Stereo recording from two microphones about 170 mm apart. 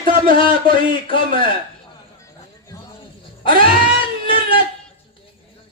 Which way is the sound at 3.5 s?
55° right (ahead or behind).